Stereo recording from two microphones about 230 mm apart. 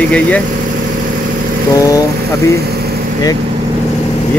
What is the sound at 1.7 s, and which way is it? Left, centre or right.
Speech, centre.